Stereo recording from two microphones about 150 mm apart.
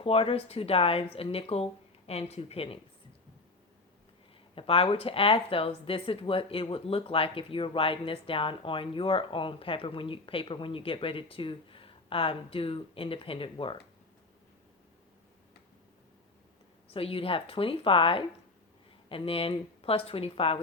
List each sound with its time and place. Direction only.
0.0 s speech: 40° left (ahead or behind)
4.5 s speech: 40° left (ahead or behind)
16.9 s speech: 40° left (ahead or behind)